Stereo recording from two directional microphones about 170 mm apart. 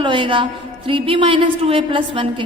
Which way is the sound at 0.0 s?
30° right (ahead or behind).